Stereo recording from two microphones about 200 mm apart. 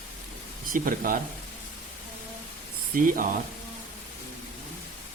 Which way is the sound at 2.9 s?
45° right (ahead or behind).